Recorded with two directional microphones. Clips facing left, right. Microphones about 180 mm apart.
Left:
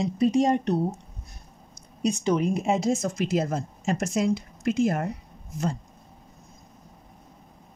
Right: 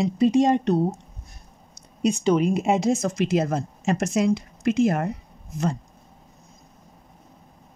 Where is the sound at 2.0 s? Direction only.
90° right.